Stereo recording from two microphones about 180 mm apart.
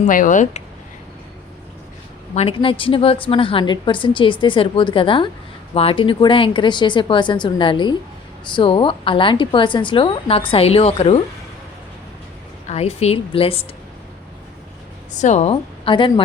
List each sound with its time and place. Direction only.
0.0 s speech: 45° left (ahead or behind)
2.3 s a woman's voice: 35° left (ahead or behind)
12.6 s a woman's voice: 35° left (ahead or behind)
15.1 s a woman's voice: 40° left (ahead or behind)